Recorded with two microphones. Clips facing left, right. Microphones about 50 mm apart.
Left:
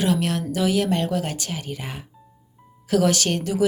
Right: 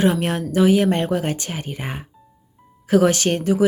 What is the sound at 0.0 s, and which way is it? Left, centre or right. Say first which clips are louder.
Speech: right 3 dB; right.